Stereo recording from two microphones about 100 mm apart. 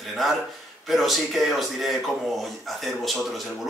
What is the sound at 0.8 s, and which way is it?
Speech, centre (ahead or behind).